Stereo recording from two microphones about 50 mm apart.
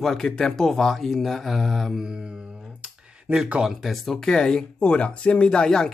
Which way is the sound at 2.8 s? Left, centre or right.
Centre.